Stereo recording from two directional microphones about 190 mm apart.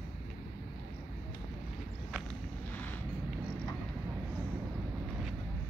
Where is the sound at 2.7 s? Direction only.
10° left (ahead or behind).